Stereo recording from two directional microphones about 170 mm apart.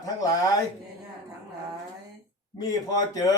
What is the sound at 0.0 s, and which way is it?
Speech, 20° left (ahead or behind).